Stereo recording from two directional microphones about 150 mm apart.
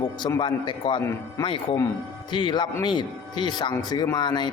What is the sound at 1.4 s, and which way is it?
A man's voice, 35° left (ahead or behind).